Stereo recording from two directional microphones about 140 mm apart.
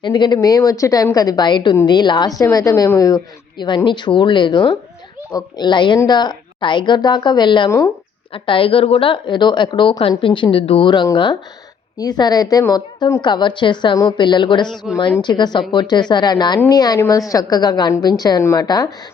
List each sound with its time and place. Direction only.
0.0 s a woman's voice: 30° left (ahead or behind)